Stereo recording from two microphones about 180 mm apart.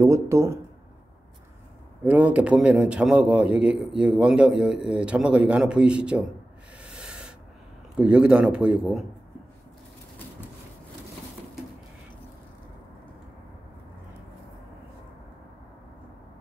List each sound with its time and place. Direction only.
0.0 s speech: 15° right (ahead or behind)
2.0 s a man's voice: 10° right (ahead or behind)
6.8 s rub: 5° right (ahead or behind)
7.9 s a man's voice: 5° right (ahead or behind)